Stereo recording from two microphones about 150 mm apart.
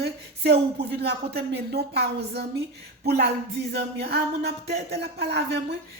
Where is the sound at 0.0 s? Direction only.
90° right.